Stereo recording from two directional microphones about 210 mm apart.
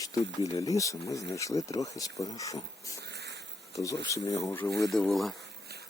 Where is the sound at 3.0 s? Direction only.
50° right (ahead or behind).